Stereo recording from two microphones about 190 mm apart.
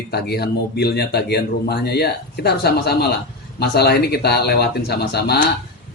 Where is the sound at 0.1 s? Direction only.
55° left (ahead or behind).